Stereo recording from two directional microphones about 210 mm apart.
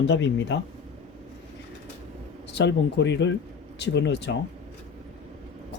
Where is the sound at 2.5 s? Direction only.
55° left (ahead or behind).